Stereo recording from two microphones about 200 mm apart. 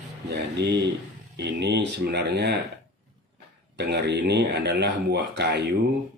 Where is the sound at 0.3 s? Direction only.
60° right (ahead or behind).